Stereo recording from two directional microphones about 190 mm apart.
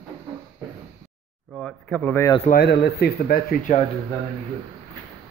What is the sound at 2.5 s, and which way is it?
Speech, 60° left (ahead or behind).